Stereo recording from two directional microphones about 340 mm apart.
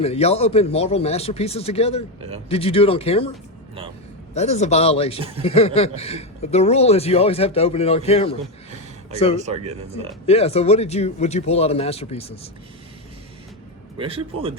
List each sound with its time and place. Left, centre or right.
0.0 s speech: centre
4.4 s speech: centre
9.4 s speech: centre
10.2 s speech: centre
14.0 s speech: centre